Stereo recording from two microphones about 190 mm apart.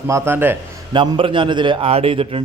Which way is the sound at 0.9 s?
25° right (ahead or behind).